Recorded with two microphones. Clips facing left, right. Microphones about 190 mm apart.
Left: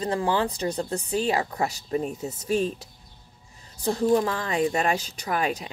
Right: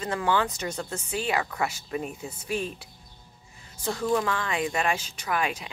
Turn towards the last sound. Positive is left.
turn(degrees=40)  # may be behind; listen again after turning